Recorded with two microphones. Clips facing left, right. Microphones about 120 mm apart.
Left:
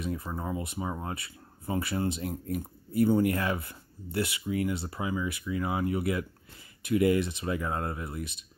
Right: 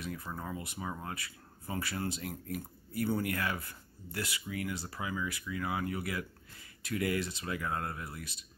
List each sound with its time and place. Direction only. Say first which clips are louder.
0.0 s speech: left 6 dB; 25° left (ahead or behind)